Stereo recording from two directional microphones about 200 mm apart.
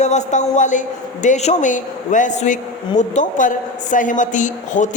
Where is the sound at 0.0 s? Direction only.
35° left (ahead or behind).